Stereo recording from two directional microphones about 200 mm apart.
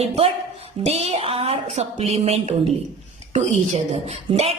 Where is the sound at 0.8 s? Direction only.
30° right (ahead or behind).